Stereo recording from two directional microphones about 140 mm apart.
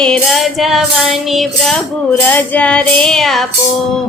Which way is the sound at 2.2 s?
15° left (ahead or behind).